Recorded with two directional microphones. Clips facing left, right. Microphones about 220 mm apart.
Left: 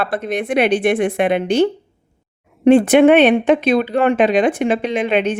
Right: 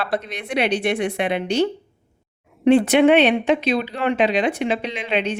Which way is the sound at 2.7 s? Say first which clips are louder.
Left 4 dB; 50° left (ahead or behind).